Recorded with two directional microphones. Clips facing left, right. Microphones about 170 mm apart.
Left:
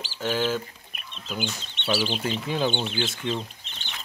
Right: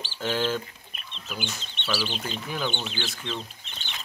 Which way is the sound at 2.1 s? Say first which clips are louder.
Left 5 dB; 5° left (ahead or behind).